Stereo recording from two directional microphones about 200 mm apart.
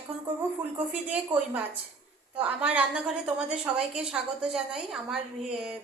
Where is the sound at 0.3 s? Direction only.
10° right (ahead or behind).